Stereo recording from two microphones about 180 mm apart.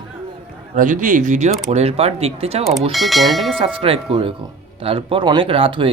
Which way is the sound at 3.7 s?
30° right (ahead or behind).